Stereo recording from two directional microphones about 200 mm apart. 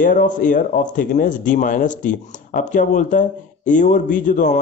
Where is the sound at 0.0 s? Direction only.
45° left (ahead or behind).